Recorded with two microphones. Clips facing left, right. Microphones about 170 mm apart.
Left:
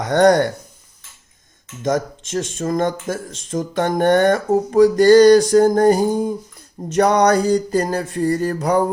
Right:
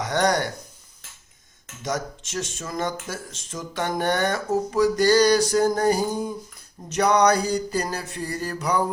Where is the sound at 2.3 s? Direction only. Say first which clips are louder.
Left 10 dB; 50° left (ahead or behind).